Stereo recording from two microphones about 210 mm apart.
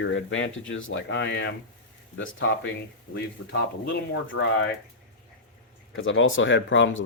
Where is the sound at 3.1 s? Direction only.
55° left (ahead or behind).